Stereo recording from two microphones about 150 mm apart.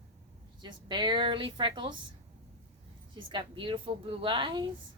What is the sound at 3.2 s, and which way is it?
Speech, 35° right (ahead or behind).